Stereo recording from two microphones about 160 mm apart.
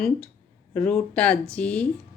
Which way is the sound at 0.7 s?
10° left (ahead or behind).